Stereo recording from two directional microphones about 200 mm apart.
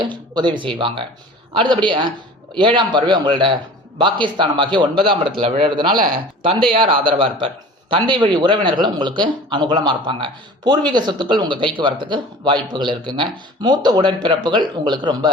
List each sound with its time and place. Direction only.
0.0 s speech: 20° right (ahead or behind)